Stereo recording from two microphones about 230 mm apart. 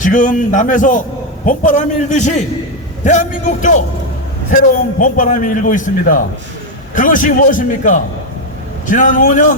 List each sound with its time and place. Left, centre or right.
0.0 s a man's voice: left